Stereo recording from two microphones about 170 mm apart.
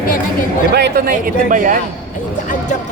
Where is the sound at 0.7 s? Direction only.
65° right (ahead or behind); by 1.8 s 50° right (ahead or behind).